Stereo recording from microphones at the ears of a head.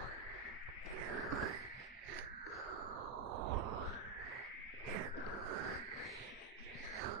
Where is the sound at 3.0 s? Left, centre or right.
Right.